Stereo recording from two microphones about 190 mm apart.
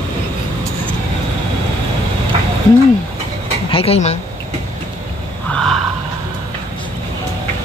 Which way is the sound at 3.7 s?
30° left (ahead or behind).